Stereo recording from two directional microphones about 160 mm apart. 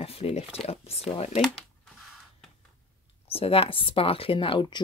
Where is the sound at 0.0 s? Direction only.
40° left (ahead or behind).